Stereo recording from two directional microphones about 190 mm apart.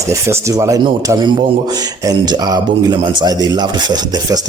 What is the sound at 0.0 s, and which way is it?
Speech, 15° right (ahead or behind).